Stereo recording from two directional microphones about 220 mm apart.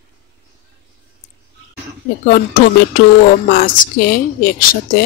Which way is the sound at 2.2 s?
40° left (ahead or behind).